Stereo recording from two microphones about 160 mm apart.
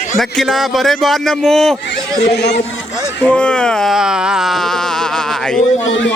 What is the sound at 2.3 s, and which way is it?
Speech, 90° left.